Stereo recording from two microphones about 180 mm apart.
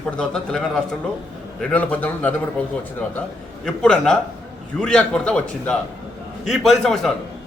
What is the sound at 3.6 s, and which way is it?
A man's voice, 5° left (ahead or behind).